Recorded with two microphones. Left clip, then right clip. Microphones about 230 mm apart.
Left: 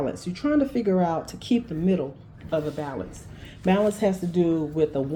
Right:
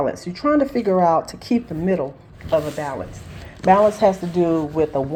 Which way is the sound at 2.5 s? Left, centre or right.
Centre.